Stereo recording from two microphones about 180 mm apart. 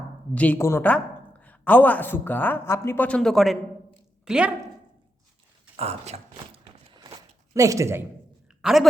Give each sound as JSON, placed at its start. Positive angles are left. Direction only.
{"t": 0.3, "sound": "a woman's voice", "side_deg": 10}
{"t": 5.7, "sound": "speech", "side_deg": -35}
{"t": 6.9, "sound": "a sound", "side_deg": -25}
{"t": 8.6, "sound": "speech", "side_deg": 0}